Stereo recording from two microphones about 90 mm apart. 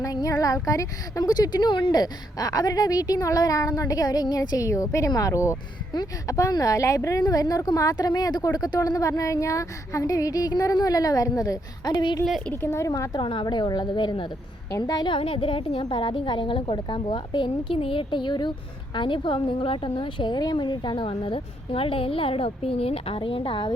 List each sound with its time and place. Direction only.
0.0 s a woman's voice: 40° left (ahead or behind)
12.7 s a woman's voice: 35° left (ahead or behind)
13.1 s a woman's voice: 65° left (ahead or behind)
14.8 s a woman's voice: 45° left (ahead or behind)
15.1 s speech: 80° left